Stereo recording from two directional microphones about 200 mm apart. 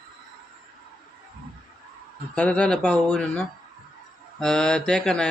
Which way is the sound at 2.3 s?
5° left (ahead or behind).